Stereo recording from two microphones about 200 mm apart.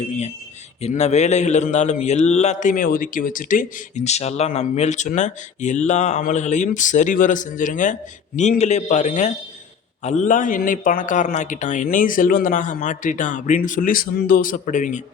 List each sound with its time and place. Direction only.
0.8 s a man's voice: 35° left (ahead or behind)